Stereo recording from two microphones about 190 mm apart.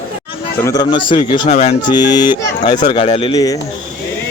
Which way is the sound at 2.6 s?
25° left (ahead or behind).